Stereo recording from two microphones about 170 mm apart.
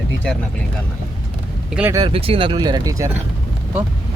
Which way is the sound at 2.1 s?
35° right (ahead or behind).